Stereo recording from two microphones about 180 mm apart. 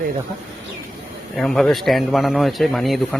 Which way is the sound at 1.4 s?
Centre (ahead or behind).